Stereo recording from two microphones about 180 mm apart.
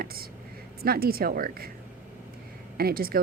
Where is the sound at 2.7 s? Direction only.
55° right (ahead or behind).